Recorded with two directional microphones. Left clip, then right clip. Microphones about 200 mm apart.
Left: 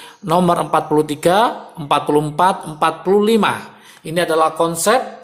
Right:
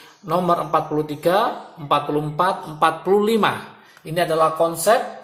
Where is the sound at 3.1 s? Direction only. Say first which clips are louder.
Left 3 dB; 20° left (ahead or behind).